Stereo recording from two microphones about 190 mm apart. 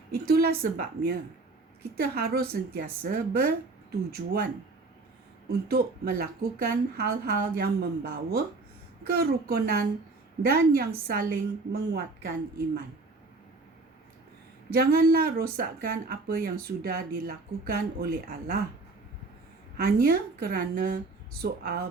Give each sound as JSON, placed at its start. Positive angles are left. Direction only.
{"t": 0.1, "sound": "a woman's voice", "side_deg": -55}
{"t": 5.5, "sound": "a woman's voice", "side_deg": -50}
{"t": 14.7, "sound": "a woman's voice", "side_deg": -50}
{"t": 19.7, "sound": "a woman's voice", "side_deg": -55}